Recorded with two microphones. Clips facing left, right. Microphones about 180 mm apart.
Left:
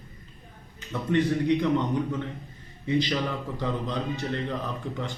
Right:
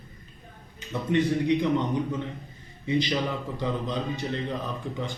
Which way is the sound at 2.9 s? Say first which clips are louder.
Even; 15° right (ahead or behind).